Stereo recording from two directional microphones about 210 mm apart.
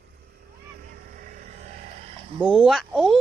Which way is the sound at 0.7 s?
45° right (ahead or behind).